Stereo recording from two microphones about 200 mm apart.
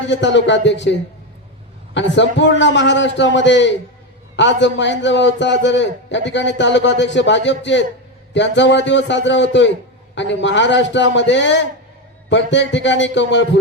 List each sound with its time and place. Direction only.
0.1 s a man's voice: 65° left (ahead or behind)
1.9 s a man's voice: 65° left (ahead or behind)